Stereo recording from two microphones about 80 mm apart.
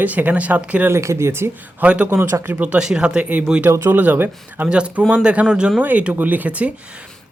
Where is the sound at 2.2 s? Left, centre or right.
Right.